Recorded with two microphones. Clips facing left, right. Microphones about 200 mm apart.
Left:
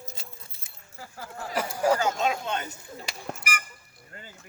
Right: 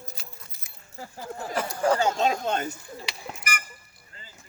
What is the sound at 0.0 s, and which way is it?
Keys jangling, 25° left (ahead or behind).